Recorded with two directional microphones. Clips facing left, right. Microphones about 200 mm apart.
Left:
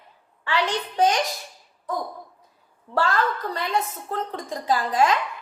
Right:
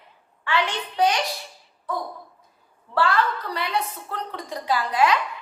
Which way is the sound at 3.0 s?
45° left (ahead or behind).